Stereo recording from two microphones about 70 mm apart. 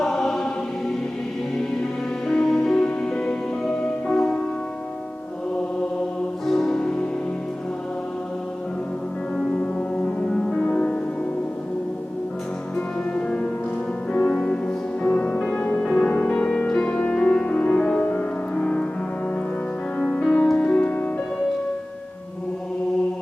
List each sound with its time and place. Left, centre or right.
0.0 s choir: centre
2.2 s music: centre
6.4 s music: centre
9.3 s music: centre
12.7 s music: centre
20.0 s music: centre